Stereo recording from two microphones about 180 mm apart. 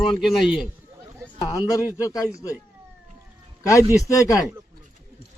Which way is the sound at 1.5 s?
20° left (ahead or behind).